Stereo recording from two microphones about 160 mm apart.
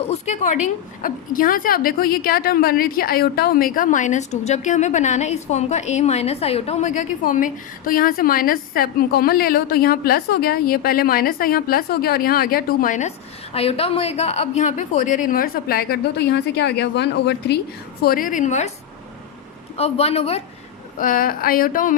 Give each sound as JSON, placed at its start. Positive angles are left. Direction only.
{"t": 0.1, "sound": "a woman's voice", "side_deg": 45}
{"t": 18.0, "sound": "a woman's voice", "side_deg": 60}
{"t": 19.7, "sound": "a man's voice", "side_deg": 40}
{"t": 21.0, "sound": "a woman's voice", "side_deg": 60}